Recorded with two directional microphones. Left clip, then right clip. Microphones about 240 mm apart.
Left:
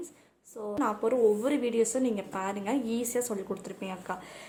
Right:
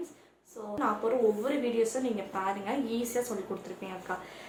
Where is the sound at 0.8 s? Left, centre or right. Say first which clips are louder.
Left 2 dB; left.